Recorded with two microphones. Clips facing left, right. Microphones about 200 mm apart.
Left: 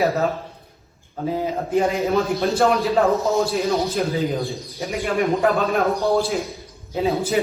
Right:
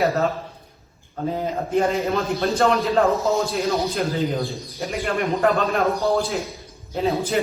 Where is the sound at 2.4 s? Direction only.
Centre (ahead or behind).